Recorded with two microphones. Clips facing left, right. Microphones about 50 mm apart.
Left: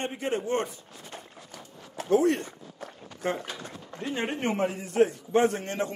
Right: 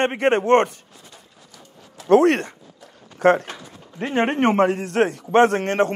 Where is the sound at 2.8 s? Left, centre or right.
Left.